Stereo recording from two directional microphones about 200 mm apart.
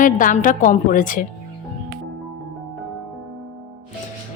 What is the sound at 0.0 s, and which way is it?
A woman's voice, 40° left (ahead or behind).